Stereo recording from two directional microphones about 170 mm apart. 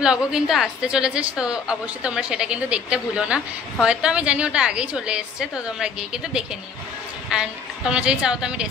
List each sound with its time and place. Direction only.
0.0 s a woman's voice: 5° right (ahead or behind)